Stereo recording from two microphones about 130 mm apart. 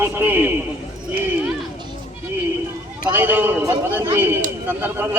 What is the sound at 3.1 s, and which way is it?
A man's voice, 15° right (ahead or behind).